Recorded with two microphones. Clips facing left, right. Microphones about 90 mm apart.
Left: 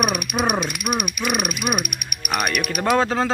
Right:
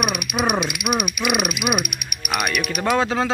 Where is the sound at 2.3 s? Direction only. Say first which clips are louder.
Even; 45° left (ahead or behind).